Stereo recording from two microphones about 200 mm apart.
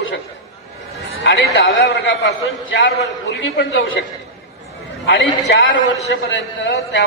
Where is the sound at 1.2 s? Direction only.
55° left (ahead or behind).